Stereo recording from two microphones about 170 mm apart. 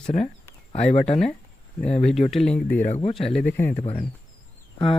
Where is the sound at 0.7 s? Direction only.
40° left (ahead or behind).